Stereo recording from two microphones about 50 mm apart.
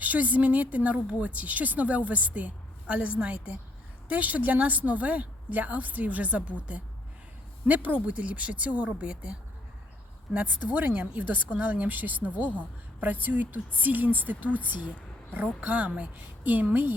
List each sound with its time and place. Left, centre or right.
0.0 s speech: right
10.3 s speech: right